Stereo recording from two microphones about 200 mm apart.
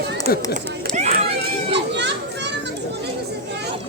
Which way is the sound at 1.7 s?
60° right (ahead or behind).